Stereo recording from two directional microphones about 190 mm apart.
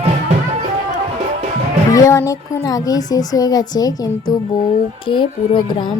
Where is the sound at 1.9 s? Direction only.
15° left (ahead or behind).